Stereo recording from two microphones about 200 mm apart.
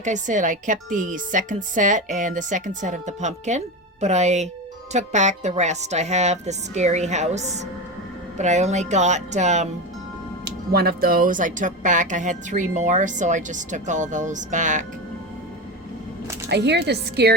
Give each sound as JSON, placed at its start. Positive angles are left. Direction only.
{"t": 0.0, "sound": "speech", "side_deg": -40}
{"t": 10.4, "sound": "speech", "side_deg": -50}
{"t": 16.5, "sound": "a woman's voice", "side_deg": -55}